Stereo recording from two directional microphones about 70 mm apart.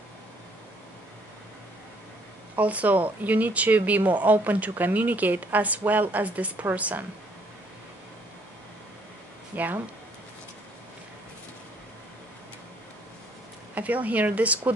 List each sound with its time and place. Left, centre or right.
2.5 s speech: right
9.5 s speech: right
13.7 s speech: right